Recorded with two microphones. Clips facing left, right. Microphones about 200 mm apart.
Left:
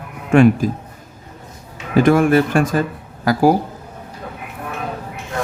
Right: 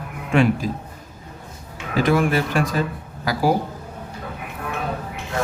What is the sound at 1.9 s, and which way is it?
Speech, 50° left (ahead or behind).